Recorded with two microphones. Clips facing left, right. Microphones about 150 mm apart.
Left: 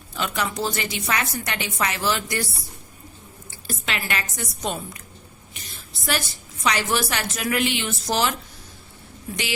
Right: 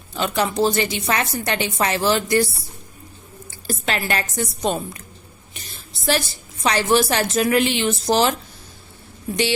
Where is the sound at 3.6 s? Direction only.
40° right (ahead or behind).